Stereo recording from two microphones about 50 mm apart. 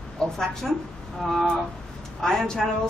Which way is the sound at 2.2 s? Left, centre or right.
Centre.